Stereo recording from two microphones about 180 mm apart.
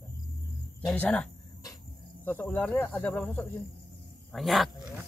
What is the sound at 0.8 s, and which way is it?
Speech, 5° left (ahead or behind).